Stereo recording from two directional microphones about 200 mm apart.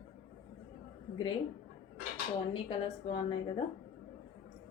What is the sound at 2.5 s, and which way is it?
Speech, 25° left (ahead or behind).